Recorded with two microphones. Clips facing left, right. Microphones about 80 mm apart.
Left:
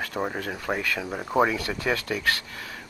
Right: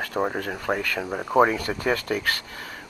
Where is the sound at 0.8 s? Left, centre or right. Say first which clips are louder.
Right 2 dB; right.